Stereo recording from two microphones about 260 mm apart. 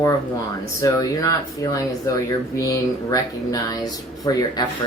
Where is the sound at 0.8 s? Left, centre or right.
Centre.